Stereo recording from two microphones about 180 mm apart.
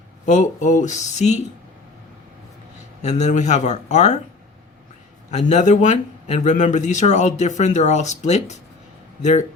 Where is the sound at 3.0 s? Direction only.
40° left (ahead or behind).